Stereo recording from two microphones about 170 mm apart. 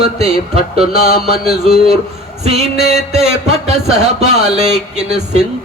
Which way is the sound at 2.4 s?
40° right (ahead or behind).